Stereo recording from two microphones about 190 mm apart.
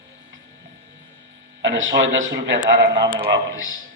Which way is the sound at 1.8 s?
80° right.